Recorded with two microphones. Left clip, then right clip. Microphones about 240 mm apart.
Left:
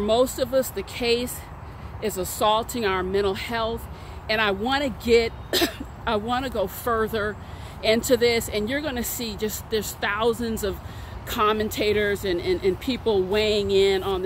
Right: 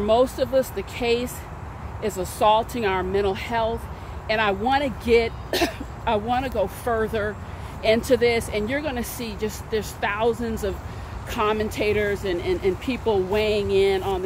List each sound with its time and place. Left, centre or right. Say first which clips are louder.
0.0 s speech: right 2 dB; left